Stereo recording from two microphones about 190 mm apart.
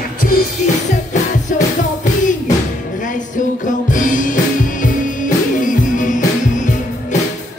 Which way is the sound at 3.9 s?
45° left (ahead or behind).